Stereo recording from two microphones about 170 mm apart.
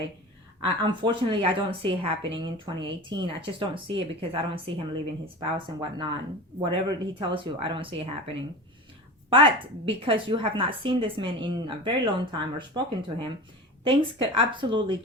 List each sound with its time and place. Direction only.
0.6 s speech: 30° right (ahead or behind)
9.3 s speech: 30° right (ahead or behind)